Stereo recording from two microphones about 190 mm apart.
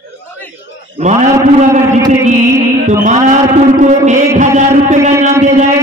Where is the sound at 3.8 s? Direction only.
40° right (ahead or behind).